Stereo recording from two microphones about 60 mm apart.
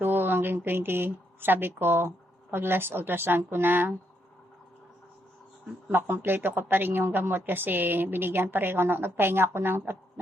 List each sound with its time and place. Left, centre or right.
0.0 s speech: right
5.9 s a woman's voice: right